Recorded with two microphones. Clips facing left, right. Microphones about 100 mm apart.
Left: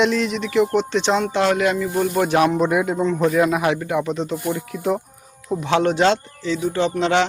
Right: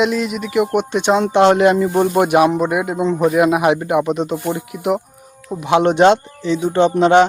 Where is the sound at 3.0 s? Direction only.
20° right (ahead or behind).